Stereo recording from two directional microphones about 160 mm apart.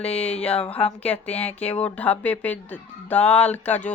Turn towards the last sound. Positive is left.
turn(degrees=10)  # may be behind; listen again after turning